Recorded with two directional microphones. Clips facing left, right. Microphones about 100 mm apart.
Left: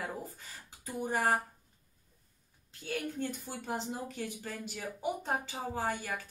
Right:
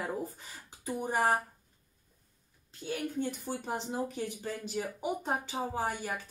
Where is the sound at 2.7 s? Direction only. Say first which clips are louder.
Right 2 dB; 20° right (ahead or behind).